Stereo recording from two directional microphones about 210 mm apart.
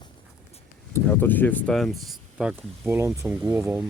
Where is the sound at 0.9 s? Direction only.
10° left (ahead or behind).